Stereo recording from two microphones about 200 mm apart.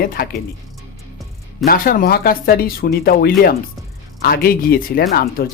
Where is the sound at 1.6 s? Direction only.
45° left (ahead or behind).